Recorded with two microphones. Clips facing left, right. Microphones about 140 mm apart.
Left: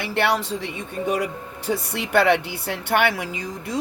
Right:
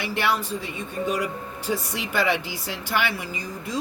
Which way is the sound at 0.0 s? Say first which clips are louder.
Left 3 dB; 65° left (ahead or behind).